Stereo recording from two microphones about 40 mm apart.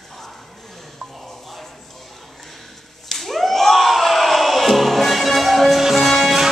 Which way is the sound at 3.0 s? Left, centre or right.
Centre.